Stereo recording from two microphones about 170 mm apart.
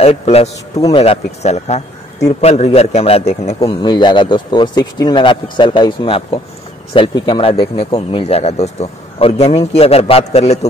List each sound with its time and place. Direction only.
0.0 s speech: 35° left (ahead or behind)
3.8 s speech: 25° left (ahead or behind)